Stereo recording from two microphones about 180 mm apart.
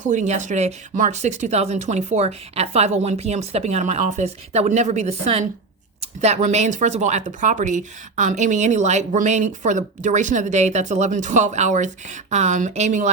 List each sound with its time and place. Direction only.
0.0 s speech: 45° right (ahead or behind)